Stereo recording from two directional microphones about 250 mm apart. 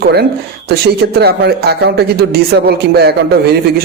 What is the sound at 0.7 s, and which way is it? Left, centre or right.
Speech, right.